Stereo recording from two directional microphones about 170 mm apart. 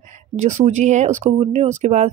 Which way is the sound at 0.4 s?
45° right (ahead or behind).